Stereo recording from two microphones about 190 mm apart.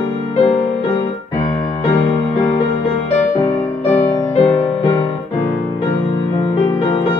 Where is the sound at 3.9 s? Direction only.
10° left (ahead or behind).